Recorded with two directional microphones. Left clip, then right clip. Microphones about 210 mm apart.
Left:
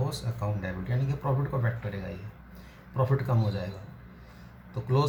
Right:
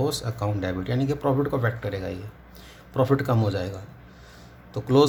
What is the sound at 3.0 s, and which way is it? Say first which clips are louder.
Speech: right 7 dB; 45° right (ahead or behind).